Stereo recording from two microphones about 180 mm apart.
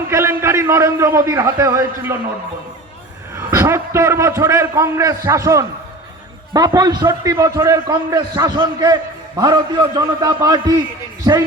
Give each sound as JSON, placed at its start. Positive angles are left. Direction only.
{"t": 0.1, "sound": "a man's voice", "side_deg": -15}
{"t": 3.5, "sound": "a man's voice", "side_deg": -15}